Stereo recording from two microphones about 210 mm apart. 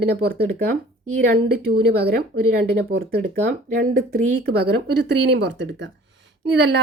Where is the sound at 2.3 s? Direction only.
90° right.